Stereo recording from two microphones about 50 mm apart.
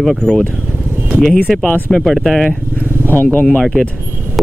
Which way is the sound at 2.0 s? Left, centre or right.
Centre.